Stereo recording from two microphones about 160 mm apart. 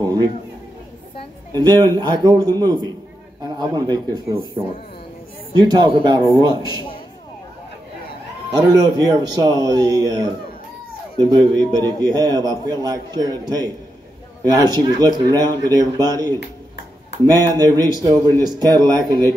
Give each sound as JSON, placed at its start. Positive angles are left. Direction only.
{"t": 1.7, "sound": "a man's voice", "side_deg": -25}
{"t": 5.6, "sound": "a man's voice", "side_deg": -25}
{"t": 8.5, "sound": "a man's voice", "side_deg": -25}
{"t": 17.3, "sound": "a man's voice", "side_deg": -25}